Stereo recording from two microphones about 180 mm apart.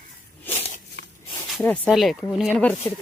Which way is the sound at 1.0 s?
70° left (ahead or behind).